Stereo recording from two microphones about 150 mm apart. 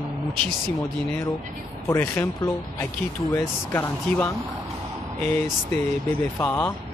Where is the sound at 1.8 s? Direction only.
20° left (ahead or behind).